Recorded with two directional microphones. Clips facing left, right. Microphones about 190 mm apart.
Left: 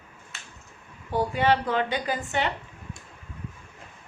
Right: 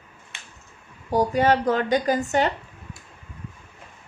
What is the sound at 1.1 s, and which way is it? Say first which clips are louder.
Speech: right 4 dB; 40° right (ahead or behind).